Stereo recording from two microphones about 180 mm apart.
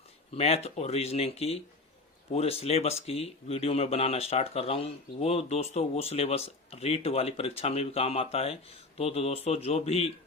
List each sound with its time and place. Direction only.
0.3 s speech: 35° left (ahead or behind)